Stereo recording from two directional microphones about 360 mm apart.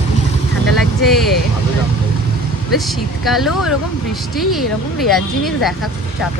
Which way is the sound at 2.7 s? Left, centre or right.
Centre.